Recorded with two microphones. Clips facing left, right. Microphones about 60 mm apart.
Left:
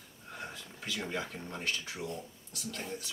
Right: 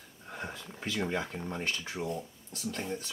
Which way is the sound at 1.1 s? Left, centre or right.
Centre.